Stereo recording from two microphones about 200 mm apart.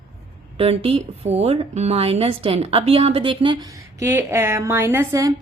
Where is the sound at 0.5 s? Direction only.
30° right (ahead or behind).